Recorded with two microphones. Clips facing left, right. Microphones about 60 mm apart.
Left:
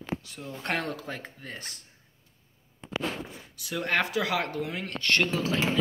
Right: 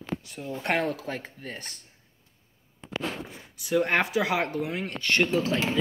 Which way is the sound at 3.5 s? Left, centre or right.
Right.